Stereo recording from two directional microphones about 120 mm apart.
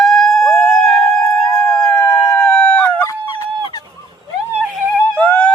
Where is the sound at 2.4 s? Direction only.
5° left (ahead or behind).